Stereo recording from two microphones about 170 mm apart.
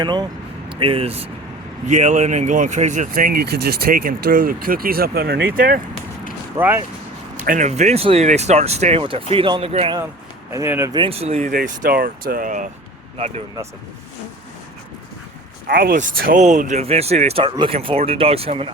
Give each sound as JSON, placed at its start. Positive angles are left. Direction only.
{"t": 0.0, "sound": "speech", "side_deg": -25}
{"t": 6.6, "sound": "speech", "side_deg": -10}
{"t": 7.4, "sound": "speech", "side_deg": -50}
{"t": 10.5, "sound": "speech", "side_deg": -15}
{"t": 10.9, "sound": "speech", "side_deg": -35}
{"t": 11.5, "sound": "speech", "side_deg": -55}
{"t": 15.6, "sound": "speech", "side_deg": -60}